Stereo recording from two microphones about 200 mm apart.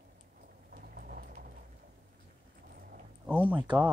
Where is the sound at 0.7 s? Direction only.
50° right (ahead or behind).